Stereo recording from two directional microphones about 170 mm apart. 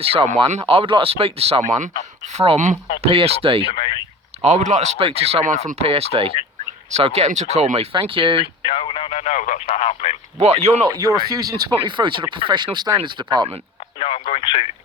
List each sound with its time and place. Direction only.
0.0 s speech: 35° right (ahead or behind)
4.4 s speech: 45° right (ahead or behind)
8.6 s radio: 30° left (ahead or behind); by 9.6 s 45° left (ahead or behind)
9.6 s speech: 35° left (ahead or behind)
10.3 s speech: 40° right (ahead or behind)
10.8 s speech: 20° right (ahead or behind)
14.0 s speech: 35° left (ahead or behind)